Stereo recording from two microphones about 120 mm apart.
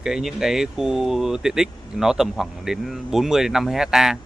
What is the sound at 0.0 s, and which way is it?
A man's voice, 5° right (ahead or behind).